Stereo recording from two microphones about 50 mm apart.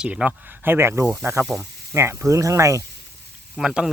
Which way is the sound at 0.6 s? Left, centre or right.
Right.